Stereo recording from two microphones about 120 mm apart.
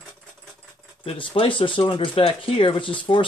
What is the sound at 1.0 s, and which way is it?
Speech, 45° left (ahead or behind).